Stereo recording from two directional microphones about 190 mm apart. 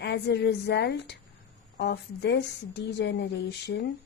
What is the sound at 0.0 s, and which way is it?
A woman's voice, 60° left (ahead or behind).